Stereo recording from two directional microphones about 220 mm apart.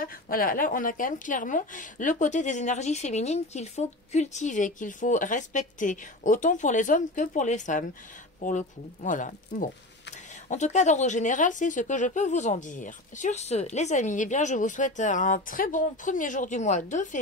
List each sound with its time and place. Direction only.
0.0 s a woman's voice: 40° left (ahead or behind)